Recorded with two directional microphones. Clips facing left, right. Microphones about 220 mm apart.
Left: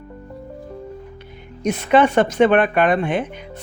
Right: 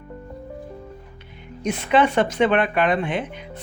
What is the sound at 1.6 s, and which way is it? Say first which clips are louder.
Speech: left 3 dB; 45° left (ahead or behind).